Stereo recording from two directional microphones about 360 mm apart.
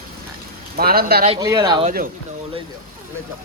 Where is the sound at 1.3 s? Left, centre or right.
Centre.